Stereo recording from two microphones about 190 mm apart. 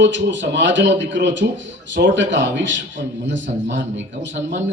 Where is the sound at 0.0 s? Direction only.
70° right (ahead or behind).